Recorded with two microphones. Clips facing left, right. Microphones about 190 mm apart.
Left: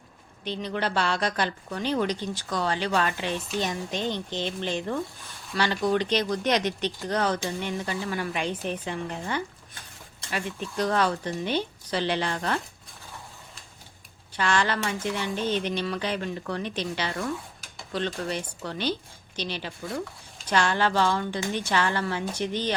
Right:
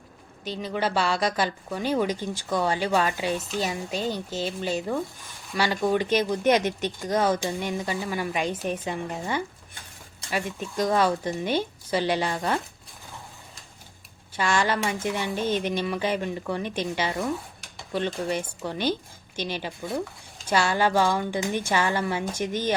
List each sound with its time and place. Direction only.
0.4 s speech: 10° right (ahead or behind)
6.6 s a woman's voice: 45° right (ahead or behind)
7.1 s speech: 10° right (ahead or behind)
8.4 s a woman's voice: 45° right (ahead or behind)
8.8 s speech: 10° right (ahead or behind)
14.3 s speech: 10° right (ahead or behind)
20.5 s speech: 10° right (ahead or behind)
22.3 s a woman's voice: 45° right (ahead or behind)